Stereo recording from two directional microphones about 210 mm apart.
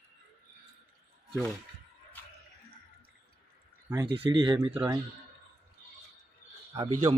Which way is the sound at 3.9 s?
20° right (ahead or behind).